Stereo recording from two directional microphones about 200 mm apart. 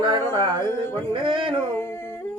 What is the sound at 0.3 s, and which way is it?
Music, 20° right (ahead or behind).